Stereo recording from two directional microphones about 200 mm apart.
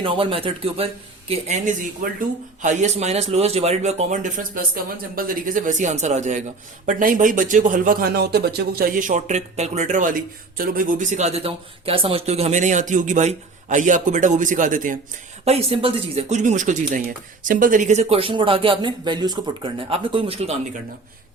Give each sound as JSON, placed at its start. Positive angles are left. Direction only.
{"t": 0.0, "sound": "speech", "side_deg": -25}
{"t": 15.4, "sound": "speech", "side_deg": -30}